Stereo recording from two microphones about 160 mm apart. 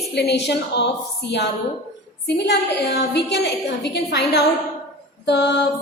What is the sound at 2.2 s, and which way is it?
A woman's voice, 90° left.